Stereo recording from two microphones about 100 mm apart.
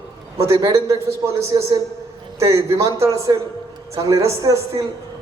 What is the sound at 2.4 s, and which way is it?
A man's voice, 30° right (ahead or behind).